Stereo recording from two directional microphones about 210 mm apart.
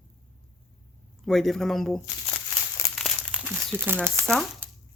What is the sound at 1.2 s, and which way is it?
Speech, centre (ahead or behind).